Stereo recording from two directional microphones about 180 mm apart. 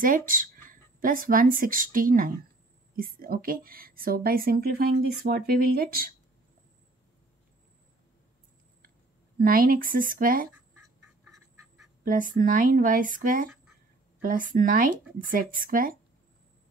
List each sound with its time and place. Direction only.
0.0 s a woman's voice: 50° right (ahead or behind)
9.4 s speech: 50° right (ahead or behind)
12.0 s speech: 50° right (ahead or behind)